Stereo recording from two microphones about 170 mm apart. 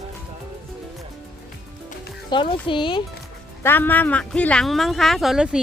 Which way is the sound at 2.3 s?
30° left (ahead or behind).